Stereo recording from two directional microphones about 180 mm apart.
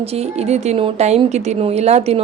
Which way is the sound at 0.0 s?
35° right (ahead or behind).